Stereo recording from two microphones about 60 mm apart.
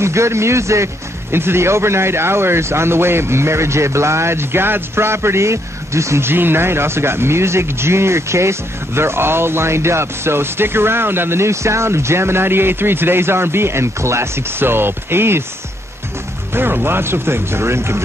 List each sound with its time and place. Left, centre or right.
0.0 s speech: right
1.3 s speech: right
16.5 s speech: right